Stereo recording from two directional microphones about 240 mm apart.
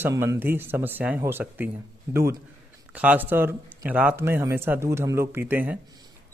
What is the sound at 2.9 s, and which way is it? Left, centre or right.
Speech, centre.